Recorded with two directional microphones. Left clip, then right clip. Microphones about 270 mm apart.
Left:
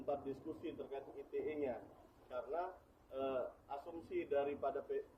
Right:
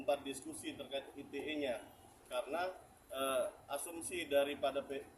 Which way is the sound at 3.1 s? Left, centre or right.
Centre.